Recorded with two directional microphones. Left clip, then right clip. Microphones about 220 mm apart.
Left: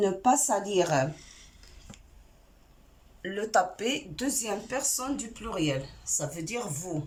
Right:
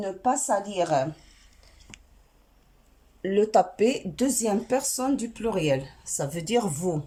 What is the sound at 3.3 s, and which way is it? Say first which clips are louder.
Speech: right 5 dB; 20° right (ahead or behind).